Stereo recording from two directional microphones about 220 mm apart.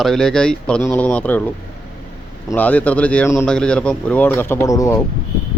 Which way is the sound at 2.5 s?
5° left (ahead or behind).